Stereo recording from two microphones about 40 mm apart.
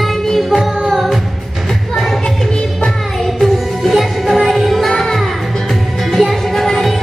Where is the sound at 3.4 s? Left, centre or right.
Centre.